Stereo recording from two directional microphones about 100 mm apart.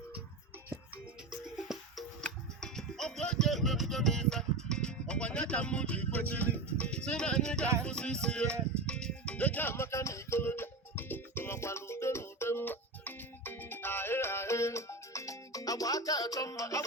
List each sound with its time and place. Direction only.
1.6 s music: 5° right (ahead or behind); by 16.8 s 35° left (ahead or behind)